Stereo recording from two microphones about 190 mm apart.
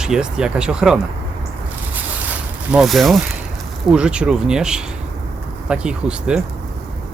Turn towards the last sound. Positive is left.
turn(degrees=-5)  # may be behind; listen again after turning